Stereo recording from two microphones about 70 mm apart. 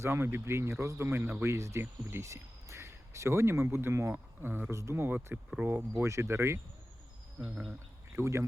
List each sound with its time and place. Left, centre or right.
0.0 s speech: right
1.5 s speech: right
4.7 s speech: right
5.0 s speech: right
7.3 s speech: centre
8.1 s speech: right